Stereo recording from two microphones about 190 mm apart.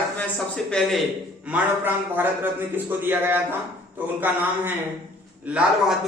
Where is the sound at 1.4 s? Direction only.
10° right (ahead or behind).